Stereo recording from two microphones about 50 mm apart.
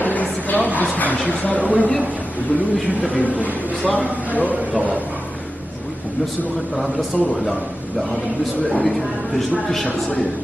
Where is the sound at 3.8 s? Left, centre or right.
Left.